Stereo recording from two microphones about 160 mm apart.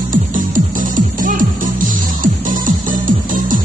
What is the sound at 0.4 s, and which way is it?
Music, 55° right (ahead or behind).